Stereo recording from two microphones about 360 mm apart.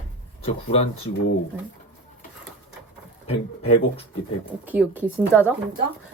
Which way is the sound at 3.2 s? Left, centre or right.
Centre.